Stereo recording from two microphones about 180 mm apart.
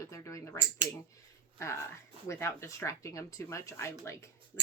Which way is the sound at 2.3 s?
15° left (ahead or behind).